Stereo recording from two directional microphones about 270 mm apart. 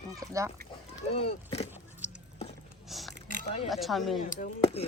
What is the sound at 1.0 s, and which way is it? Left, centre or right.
Speech, left.